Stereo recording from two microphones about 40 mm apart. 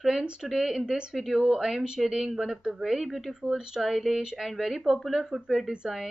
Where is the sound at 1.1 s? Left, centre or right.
Centre.